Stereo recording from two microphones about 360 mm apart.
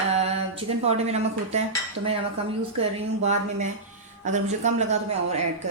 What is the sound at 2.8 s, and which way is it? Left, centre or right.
A woman's voice, centre.